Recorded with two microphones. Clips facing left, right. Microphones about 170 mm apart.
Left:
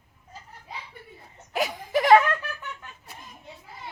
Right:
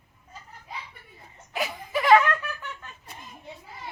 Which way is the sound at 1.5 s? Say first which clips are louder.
Left 4 dB; 45° left (ahead or behind).